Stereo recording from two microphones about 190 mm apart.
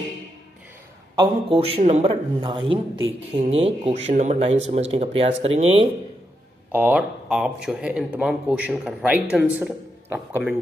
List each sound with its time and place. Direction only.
1.1 s a man's voice: 25° right (ahead or behind)
6.7 s speech: 10° right (ahead or behind)